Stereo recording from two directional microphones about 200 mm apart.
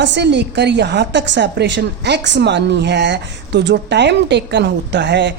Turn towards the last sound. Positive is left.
turn(degrees=-60)  # may be behind; listen again after turning